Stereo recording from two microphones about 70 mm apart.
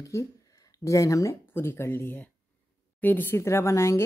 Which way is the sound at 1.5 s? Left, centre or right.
Left.